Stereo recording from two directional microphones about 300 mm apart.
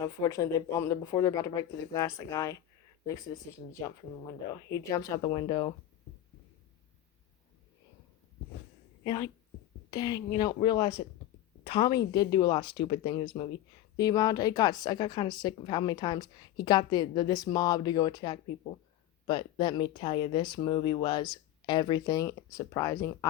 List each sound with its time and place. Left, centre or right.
0.0 s a woman's voice: centre
3.7 s a woman's voice: centre
9.0 s a woman's voice: centre